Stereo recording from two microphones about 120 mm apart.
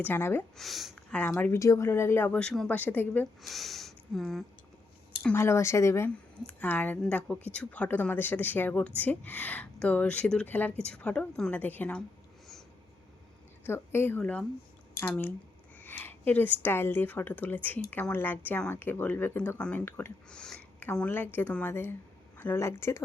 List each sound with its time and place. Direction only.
0.0 s speech: 20° left (ahead or behind)
0.5 s speech: centre (ahead or behind)
0.9 s speech: 10° left (ahead or behind)
1.5 s speech: 25° left (ahead or behind)
3.4 s speech: centre (ahead or behind)
5.3 s speech: 20° left (ahead or behind)
6.5 s speech: 15° left (ahead or behind)
13.7 s speech: 20° left (ahead or behind)
20.3 s speech: 5° left (ahead or behind)